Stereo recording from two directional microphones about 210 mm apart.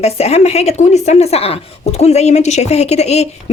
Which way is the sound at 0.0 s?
30° left (ahead or behind).